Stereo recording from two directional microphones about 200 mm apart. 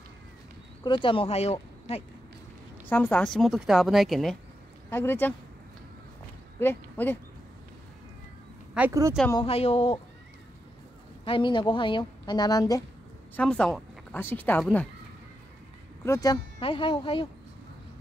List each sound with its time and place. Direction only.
0.8 s speech: 25° left (ahead or behind)
2.9 s a woman's voice: 10° left (ahead or behind)
4.8 s speech: 10° left (ahead or behind)
6.6 s speech: 10° left (ahead or behind)
8.7 s speech: 10° right (ahead or behind)
9.3 s speech: 25° left (ahead or behind)
11.2 s speech: 25° left (ahead or behind)
13.4 s a woman's voice: 5° left (ahead or behind)
16.0 s speech: 15° left (ahead or behind)